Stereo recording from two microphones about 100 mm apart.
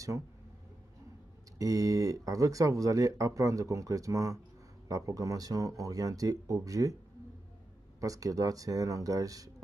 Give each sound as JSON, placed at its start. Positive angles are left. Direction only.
{"t": 1.6, "sound": "speech", "side_deg": -35}
{"t": 8.0, "sound": "speech", "side_deg": -35}